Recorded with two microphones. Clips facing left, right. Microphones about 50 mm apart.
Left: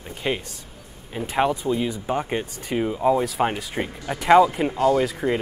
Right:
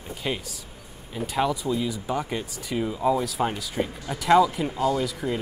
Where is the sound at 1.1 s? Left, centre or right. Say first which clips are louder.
Left 3 dB; left.